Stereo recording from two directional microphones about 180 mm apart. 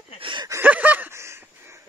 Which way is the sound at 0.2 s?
25° right (ahead or behind).